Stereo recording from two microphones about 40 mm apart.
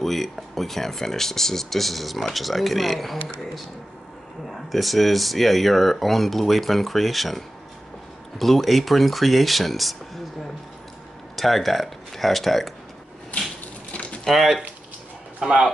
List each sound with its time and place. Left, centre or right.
0.0 s speech: centre
4.5 s speech: centre
11.3 s speech: centre
13.3 s crushing: left
14.2 s speech: centre
15.4 s speech: centre